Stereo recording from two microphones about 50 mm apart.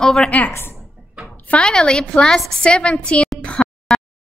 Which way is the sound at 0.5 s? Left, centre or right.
Left.